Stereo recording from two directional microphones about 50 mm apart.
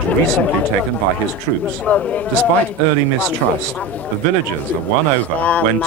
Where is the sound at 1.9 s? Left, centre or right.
Left.